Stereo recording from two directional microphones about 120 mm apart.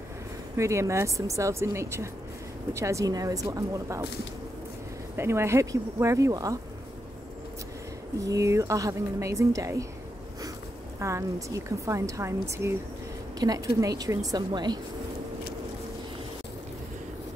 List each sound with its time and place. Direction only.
0.6 s a woman's voice: 25° right (ahead or behind)
5.1 s a woman's voice: 20° right (ahead or behind)
8.2 s a woman's voice: 25° right (ahead or behind)
11.0 s a woman's voice: 25° right (ahead or behind)